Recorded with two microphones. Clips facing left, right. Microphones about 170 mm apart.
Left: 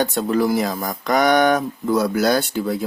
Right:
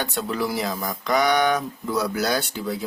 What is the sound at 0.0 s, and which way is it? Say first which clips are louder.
Speech: left 7 dB; 40° left (ahead or behind).